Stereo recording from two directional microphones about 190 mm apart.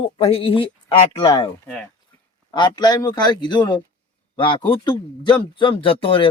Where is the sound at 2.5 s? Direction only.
20° left (ahead or behind).